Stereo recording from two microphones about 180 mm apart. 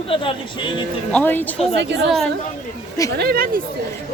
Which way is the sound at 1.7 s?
75° right (ahead or behind).